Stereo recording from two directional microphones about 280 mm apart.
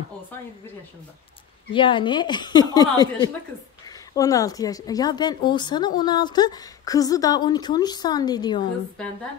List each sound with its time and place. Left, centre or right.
1.7 s speech: centre